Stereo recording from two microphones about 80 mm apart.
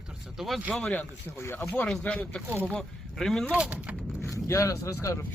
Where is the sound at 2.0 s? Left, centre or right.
Centre.